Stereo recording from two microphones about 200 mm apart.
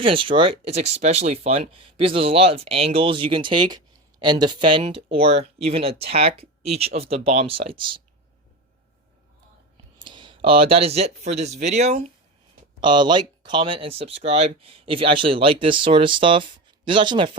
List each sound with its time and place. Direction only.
0.0 s speech: 25° right (ahead or behind)
10.0 s speech: 25° right (ahead or behind)
12.8 s speech: 20° right (ahead or behind)